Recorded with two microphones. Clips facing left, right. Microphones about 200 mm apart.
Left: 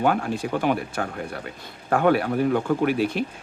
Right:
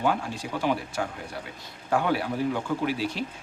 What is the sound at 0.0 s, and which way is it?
Speech, 55° left (ahead or behind).